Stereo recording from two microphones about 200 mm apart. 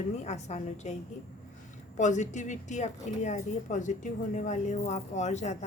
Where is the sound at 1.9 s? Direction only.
35° left (ahead or behind).